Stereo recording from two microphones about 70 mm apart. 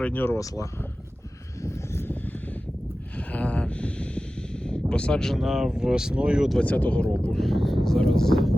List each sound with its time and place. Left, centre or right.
0.0 s speech: left
0.3 s speech: left
1.6 s vehicle: left
3.2 s snort: centre
6.6 s speech: left
7.3 s speech: centre